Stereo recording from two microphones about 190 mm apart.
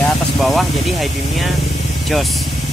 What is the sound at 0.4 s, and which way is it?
Spray, centre (ahead or behind).